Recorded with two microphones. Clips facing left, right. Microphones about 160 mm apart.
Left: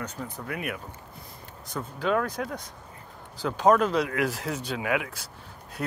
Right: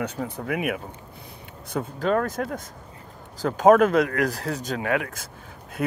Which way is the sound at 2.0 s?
45° right (ahead or behind).